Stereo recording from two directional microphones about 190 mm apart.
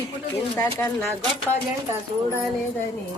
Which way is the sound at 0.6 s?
15° left (ahead or behind).